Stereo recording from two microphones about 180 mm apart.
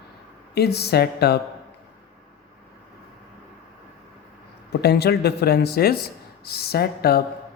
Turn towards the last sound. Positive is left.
turn(degrees=60)  # may be behind; listen again after turning